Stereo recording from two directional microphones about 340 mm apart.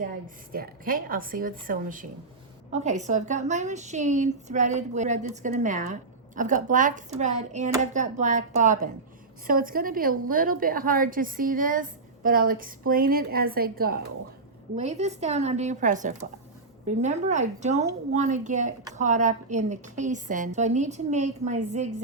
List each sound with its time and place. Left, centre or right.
0.5 s a woman's voice: right